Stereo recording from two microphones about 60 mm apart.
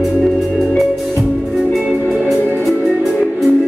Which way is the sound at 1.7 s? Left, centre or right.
Centre.